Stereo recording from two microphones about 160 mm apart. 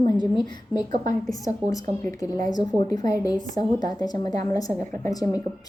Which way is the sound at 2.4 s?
25° left (ahead or behind).